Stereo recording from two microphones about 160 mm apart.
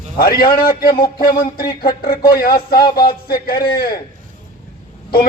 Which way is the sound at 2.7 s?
30° left (ahead or behind).